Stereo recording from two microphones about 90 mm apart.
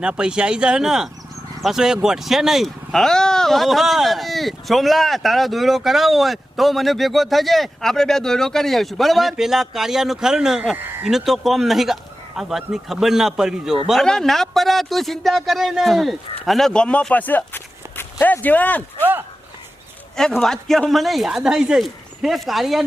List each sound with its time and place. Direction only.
0.0 s speech: 10° right (ahead or behind)
14.0 s speech: 5° left (ahead or behind)
20.4 s speech: 5° left (ahead or behind)